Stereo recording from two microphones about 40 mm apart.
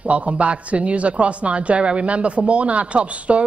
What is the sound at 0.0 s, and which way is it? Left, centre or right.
A man's voice, right.